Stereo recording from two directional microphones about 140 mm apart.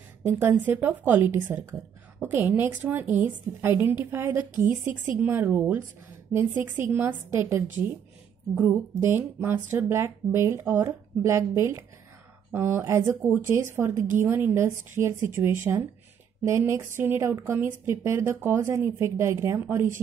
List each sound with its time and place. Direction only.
0.3 s a woman's voice: 15° right (ahead or behind)